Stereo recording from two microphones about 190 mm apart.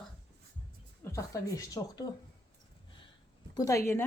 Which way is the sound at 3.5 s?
15° left (ahead or behind).